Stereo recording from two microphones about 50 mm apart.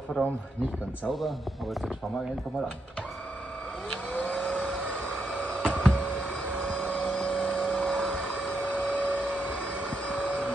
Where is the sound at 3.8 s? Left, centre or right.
Left.